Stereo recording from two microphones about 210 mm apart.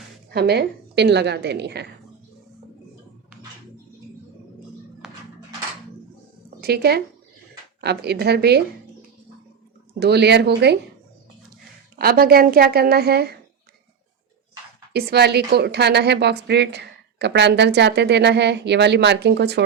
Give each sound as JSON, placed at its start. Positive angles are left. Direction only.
{"t": 0.3, "sound": "a woman's voice", "side_deg": -50}
{"t": 5.0, "sound": "a sound", "side_deg": -5}
{"t": 6.6, "sound": "a woman's voice", "side_deg": -50}
{"t": 10.0, "sound": "a woman's voice", "side_deg": -50}
{"t": 11.9, "sound": "a woman's voice", "side_deg": -45}
{"t": 14.9, "sound": "a woman's voice", "side_deg": -50}